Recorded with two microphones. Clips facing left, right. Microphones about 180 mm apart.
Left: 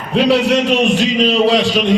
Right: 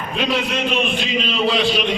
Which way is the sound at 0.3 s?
75° left (ahead or behind).